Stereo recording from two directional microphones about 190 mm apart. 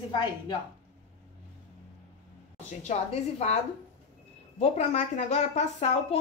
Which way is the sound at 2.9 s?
35° left (ahead or behind).